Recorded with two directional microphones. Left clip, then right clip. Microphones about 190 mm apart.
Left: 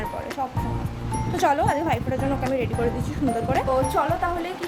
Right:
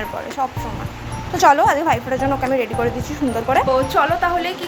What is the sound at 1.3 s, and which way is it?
Speech, 10° left (ahead or behind).